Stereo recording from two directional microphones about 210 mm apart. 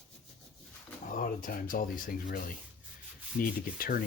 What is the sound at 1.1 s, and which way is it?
Speech, 40° left (ahead or behind).